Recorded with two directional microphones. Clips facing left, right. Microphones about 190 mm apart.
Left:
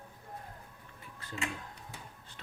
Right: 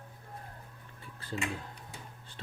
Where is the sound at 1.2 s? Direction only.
30° right (ahead or behind).